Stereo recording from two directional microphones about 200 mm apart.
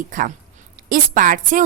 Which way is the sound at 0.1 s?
40° right (ahead or behind).